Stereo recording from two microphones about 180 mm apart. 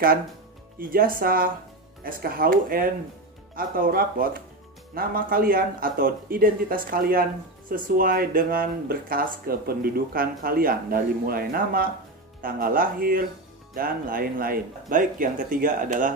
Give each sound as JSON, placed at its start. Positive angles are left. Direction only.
{"t": 0.7, "sound": "speech", "side_deg": -55}